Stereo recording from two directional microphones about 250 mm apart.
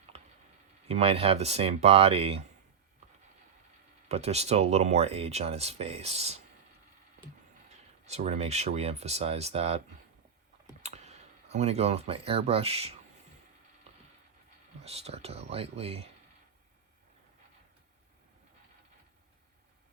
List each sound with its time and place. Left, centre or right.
0.9 s speech: right
4.1 s speech: right
8.0 s speech: right
10.8 s speech: right
14.8 s speech: right